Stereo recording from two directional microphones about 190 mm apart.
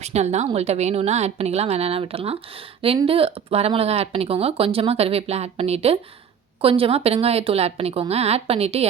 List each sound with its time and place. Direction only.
0.0 s speech: 35° right (ahead or behind)